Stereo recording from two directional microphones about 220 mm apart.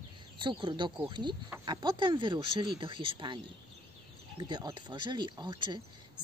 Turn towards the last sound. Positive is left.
turn(degrees=-20)  # may be behind; listen again after turning